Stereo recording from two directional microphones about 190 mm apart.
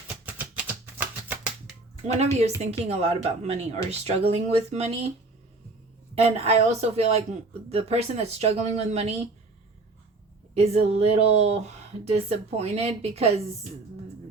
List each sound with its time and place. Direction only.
0.3 s music: 10° right (ahead or behind)
2.6 s speech: 35° right (ahead or behind)
6.2 s speech: 35° right (ahead or behind)
10.5 s speech: 35° right (ahead or behind)